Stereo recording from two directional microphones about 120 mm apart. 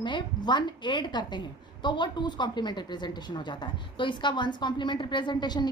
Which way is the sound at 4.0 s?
40° left (ahead or behind).